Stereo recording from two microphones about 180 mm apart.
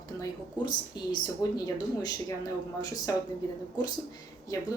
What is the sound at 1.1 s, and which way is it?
Speech, 20° left (ahead or behind).